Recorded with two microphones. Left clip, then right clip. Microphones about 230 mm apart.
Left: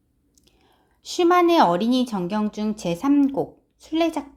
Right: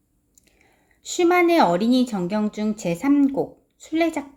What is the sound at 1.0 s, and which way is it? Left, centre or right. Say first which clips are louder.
Speech: even; centre.